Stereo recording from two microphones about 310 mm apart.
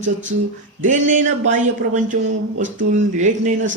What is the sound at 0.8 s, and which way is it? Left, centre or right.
Speech, right.